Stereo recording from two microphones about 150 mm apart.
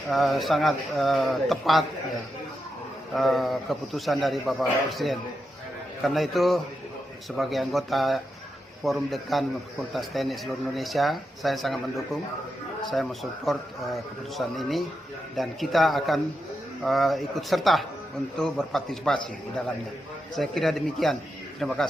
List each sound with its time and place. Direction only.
0.1 s speech: centre (ahead or behind)
3.2 s speech: centre (ahead or behind)
6.1 s speech: centre (ahead or behind)
20.3 s speech: centre (ahead or behind)